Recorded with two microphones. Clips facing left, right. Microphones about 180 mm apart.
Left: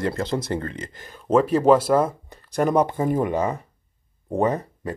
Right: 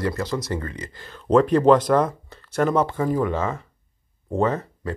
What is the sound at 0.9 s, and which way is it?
Speech, 15° left (ahead or behind).